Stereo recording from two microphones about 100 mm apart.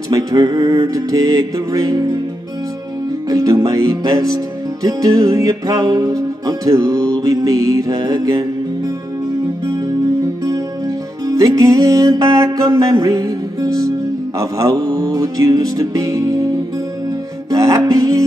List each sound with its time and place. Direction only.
0.1 s music: 40° right (ahead or behind)
3.3 s music: 35° right (ahead or behind)
11.2 s music: 35° right (ahead or behind)
17.5 s music: 35° right (ahead or behind)